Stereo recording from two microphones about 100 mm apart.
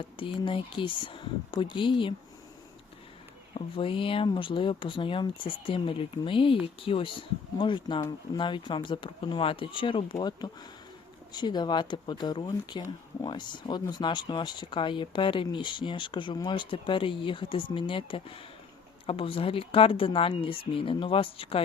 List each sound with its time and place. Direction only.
0.3 s speech: 55° left (ahead or behind)
3.5 s speech: 65° left (ahead or behind)